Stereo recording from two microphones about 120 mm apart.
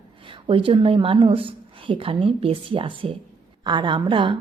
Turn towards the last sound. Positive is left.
turn(degrees=-45)  # may be behind; listen again after turning